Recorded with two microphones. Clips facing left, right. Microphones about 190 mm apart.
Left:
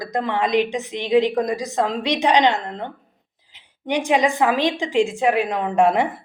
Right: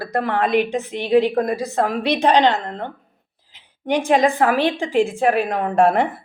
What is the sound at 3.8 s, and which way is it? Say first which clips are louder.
A woman's voice: right 2 dB; 15° left (ahead or behind).